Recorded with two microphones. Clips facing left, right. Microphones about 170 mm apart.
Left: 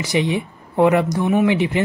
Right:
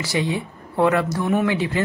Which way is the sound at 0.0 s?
20° left (ahead or behind).